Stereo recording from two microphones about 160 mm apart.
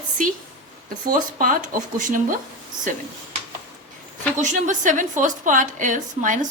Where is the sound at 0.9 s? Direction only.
60° right (ahead or behind).